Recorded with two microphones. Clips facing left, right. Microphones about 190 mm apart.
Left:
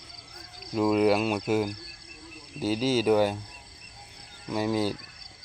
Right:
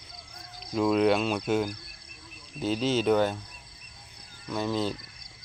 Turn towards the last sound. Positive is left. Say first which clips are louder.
# left 2 dB
turn(degrees=10)  # may be behind; listen again after turning